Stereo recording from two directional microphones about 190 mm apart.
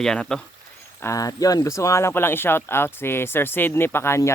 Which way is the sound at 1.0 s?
20° left (ahead or behind).